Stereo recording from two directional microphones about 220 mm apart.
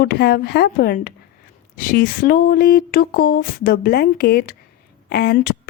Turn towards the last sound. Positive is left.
turn(degrees=45)  # may be behind; listen again after turning